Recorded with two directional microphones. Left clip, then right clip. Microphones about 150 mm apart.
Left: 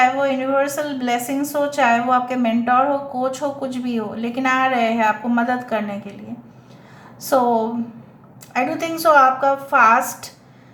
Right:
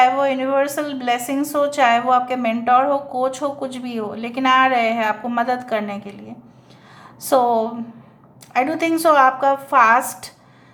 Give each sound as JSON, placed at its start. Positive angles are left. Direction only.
{"t": 0.0, "sound": "a woman's voice", "side_deg": -30}
{"t": 7.2, "sound": "a woman's voice", "side_deg": -30}